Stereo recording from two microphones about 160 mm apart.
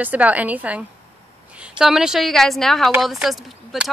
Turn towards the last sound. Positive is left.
turn(degrees=0)  # may be behind; listen again after turning